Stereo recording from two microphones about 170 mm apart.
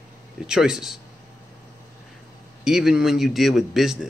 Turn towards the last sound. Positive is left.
turn(degrees=0)  # may be behind; listen again after turning